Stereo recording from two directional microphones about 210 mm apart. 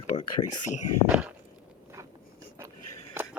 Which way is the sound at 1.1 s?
5° right (ahead or behind).